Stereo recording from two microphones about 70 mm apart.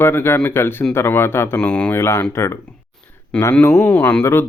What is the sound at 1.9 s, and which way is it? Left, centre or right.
Speech, left.